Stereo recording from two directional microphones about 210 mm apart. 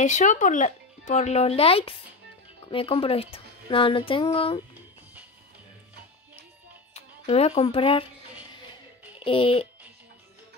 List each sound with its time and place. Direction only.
0.0 s speech: 35° left (ahead or behind)
6.9 s speech: 30° left (ahead or behind)
9.2 s speech: 25° left (ahead or behind)